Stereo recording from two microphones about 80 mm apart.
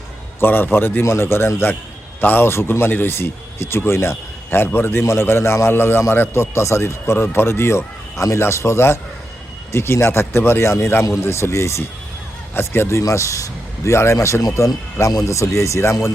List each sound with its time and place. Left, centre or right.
0.3 s a man's voice: left